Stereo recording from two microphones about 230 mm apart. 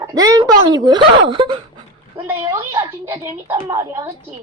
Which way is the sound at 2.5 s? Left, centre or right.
Centre.